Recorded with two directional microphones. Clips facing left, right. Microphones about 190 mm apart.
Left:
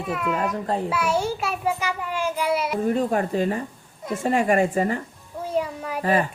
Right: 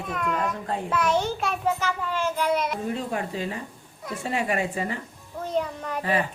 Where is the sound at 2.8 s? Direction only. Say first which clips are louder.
Left 7 dB; 50° left (ahead or behind).